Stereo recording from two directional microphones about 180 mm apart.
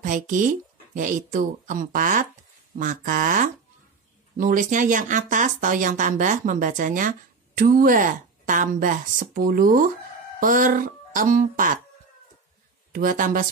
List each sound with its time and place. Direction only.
0.0 s speech: 45° right (ahead or behind)
12.9 s speech: 50° right (ahead or behind)